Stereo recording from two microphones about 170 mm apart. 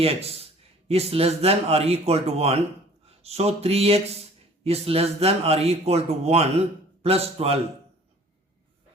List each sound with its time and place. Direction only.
0.0 s speech: 35° right (ahead or behind)